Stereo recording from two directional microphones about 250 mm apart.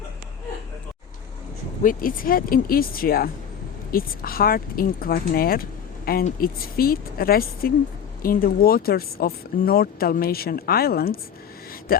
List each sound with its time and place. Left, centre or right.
1.8 s speech: left